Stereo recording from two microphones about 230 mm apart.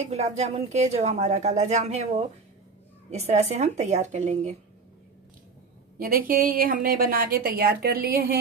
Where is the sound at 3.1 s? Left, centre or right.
Right.